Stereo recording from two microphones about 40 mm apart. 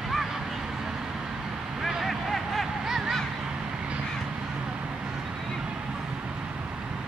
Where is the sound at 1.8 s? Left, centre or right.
Centre.